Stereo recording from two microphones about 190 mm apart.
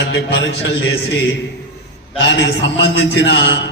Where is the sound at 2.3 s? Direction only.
65° left (ahead or behind).